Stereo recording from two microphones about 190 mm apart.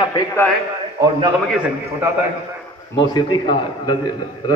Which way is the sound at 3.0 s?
20° left (ahead or behind).